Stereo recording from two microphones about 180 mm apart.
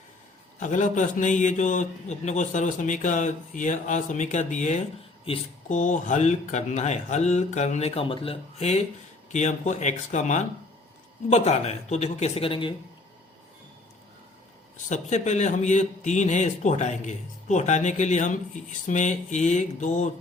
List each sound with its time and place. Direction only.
0.6 s a man's voice: 45° left (ahead or behind)
5.3 s a man's voice: 30° left (ahead or behind)
5.6 s a man's voice: 45° left (ahead or behind); by 12.7 s 30° left (ahead or behind)
14.8 s a man's voice: 40° left (ahead or behind)